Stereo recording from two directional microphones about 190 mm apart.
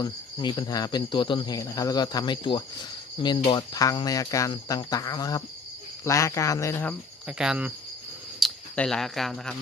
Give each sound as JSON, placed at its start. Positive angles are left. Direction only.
{"t": 0.0, "sound": "speech", "side_deg": 25}
{"t": 7.3, "sound": "cricket", "side_deg": -5}
{"t": 8.4, "sound": "speech", "side_deg": 5}